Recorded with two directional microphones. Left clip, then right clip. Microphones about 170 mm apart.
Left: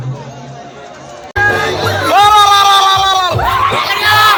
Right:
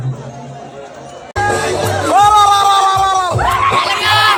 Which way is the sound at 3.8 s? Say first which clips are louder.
Left 2 dB; 40° left (ahead or behind).